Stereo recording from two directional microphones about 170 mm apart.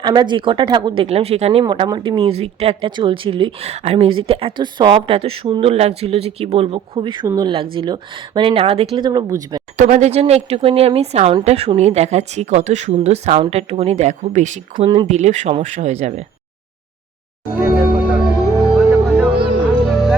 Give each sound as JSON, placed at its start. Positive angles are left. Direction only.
{"t": 0.0, "sound": "speech", "side_deg": -25}
{"t": 1.0, "sound": "speech", "side_deg": -35}
{"t": 9.7, "sound": "speech", "side_deg": -45}
{"t": 17.6, "sound": "music", "side_deg": -5}